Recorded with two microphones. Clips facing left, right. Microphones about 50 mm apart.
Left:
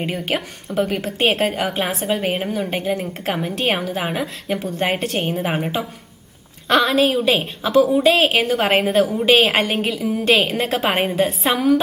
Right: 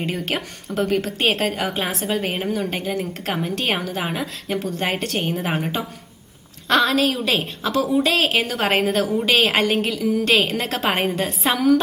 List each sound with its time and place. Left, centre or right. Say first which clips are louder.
0.0 s a woman's voice: left 2 dB; centre